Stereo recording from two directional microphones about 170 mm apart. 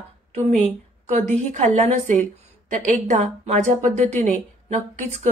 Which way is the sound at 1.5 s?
45° right (ahead or behind).